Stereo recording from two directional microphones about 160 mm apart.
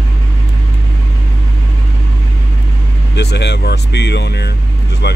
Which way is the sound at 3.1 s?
90° left.